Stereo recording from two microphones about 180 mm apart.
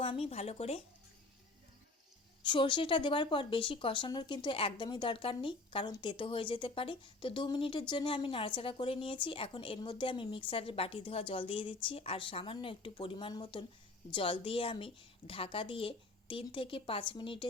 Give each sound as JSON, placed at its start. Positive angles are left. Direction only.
{"t": 0.0, "sound": "speech", "side_deg": 35}
{"t": 2.4, "sound": "speech", "side_deg": 25}